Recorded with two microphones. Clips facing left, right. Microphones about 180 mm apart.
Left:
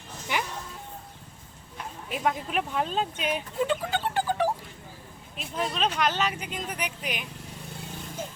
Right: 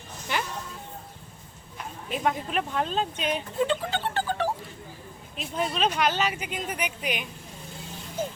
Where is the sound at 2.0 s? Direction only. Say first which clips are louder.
Right 1 dB; 5° left (ahead or behind).